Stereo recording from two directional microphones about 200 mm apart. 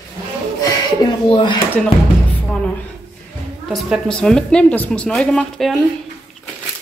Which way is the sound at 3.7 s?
Centre (ahead or behind).